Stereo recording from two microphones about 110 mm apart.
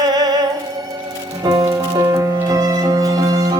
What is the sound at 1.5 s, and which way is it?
Music, 35° right (ahead or behind).